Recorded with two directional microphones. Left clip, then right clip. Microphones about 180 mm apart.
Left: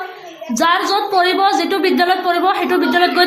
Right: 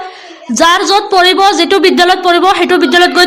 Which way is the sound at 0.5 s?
40° right (ahead or behind).